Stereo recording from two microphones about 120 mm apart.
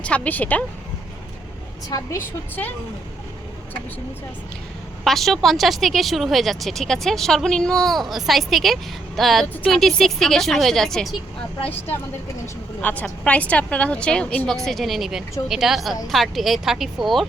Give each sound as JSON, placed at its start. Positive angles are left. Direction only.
{"t": 0.0, "sound": "a woman's voice", "side_deg": 10}
{"t": 1.9, "sound": "a woman's voice", "side_deg": 25}
{"t": 2.6, "sound": "a woman's voice", "side_deg": 15}
{"t": 5.0, "sound": "speech", "side_deg": 0}
{"t": 11.6, "sound": "speech", "side_deg": 55}
{"t": 12.8, "sound": "a woman's voice", "side_deg": 10}